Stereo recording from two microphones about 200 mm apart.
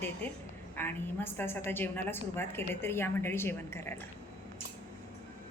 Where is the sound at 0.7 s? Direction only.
10° left (ahead or behind).